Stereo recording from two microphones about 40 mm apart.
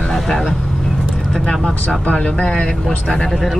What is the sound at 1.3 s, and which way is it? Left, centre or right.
Speech, centre.